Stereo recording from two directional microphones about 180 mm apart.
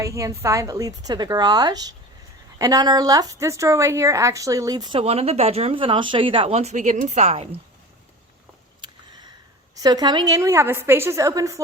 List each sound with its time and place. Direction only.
0.0 s speech: 15° right (ahead or behind); by 7.4 s 40° right (ahead or behind)
9.8 s a woman's voice: 25° right (ahead or behind)